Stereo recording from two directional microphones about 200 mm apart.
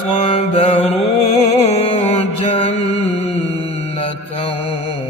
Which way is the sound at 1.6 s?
30° left (ahead or behind).